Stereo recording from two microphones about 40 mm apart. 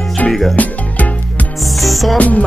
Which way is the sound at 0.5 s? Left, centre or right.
Left.